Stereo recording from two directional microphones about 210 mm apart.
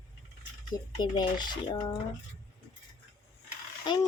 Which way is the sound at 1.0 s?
20° left (ahead or behind).